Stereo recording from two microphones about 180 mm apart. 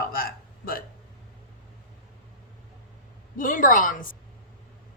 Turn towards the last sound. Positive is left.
turn(degrees=50)  # may be behind; listen again after turning